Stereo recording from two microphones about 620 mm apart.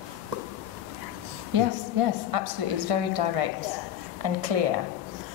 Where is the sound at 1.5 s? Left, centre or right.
Right.